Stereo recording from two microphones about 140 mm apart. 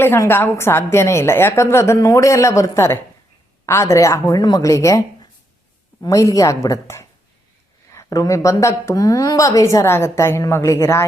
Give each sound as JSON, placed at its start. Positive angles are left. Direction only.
{"t": 0.0, "sound": "a woman's voice", "side_deg": 15}